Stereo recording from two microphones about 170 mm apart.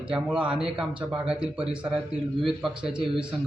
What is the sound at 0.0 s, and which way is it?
Speech, 5° right (ahead or behind).